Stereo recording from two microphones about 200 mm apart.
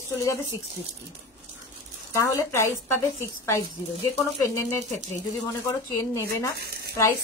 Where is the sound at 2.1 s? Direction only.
15° left (ahead or behind).